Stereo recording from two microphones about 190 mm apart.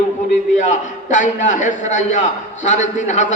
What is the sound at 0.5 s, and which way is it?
A man's voice, 40° left (ahead or behind).